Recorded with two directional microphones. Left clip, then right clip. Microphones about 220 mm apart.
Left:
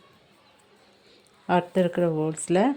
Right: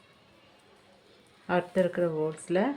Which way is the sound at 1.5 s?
35° left (ahead or behind).